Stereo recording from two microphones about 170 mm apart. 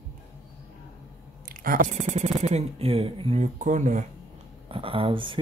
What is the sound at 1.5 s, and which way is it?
Speech, 55° right (ahead or behind).